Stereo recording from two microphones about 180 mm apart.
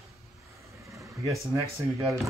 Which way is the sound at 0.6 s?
15° right (ahead or behind).